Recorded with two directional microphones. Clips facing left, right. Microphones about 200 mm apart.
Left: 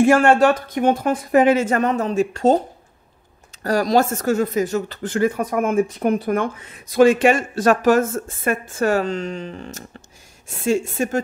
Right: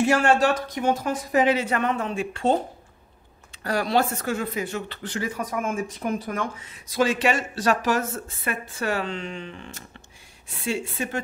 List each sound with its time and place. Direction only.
0.0 s speech: 55° left (ahead or behind)
3.6 s speech: 40° left (ahead or behind)